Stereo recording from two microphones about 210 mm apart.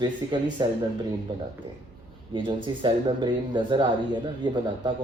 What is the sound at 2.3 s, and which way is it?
Speech, 25° right (ahead or behind).